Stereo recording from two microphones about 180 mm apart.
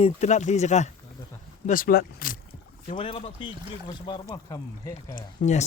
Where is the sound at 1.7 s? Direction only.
50° left (ahead or behind).